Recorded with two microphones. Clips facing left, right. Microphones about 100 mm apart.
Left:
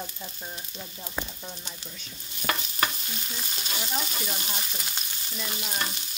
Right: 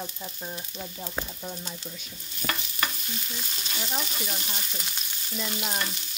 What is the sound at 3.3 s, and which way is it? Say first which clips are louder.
Frying: left 1 dB; 15° left (ahead or behind).